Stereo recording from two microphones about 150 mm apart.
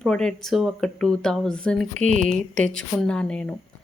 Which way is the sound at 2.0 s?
55° right (ahead or behind).